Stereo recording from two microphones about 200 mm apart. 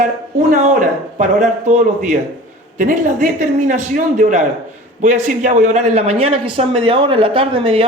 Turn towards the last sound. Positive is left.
turn(degrees=-30)  # may be behind; listen again after turning